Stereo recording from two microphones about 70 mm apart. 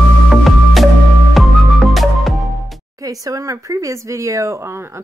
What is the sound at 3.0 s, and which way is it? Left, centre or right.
A woman's voice, right.